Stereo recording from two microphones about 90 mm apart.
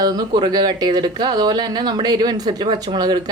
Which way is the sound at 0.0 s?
50° right (ahead or behind).